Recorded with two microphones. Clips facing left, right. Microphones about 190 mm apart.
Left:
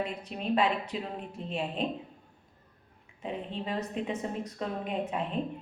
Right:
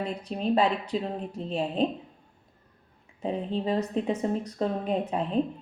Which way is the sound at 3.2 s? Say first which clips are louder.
Right 7 dB; 35° right (ahead or behind).